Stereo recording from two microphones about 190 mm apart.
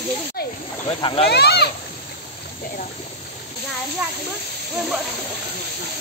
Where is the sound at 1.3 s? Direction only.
60° left (ahead or behind).